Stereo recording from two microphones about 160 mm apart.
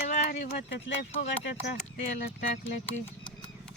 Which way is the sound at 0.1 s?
60° left (ahead or behind).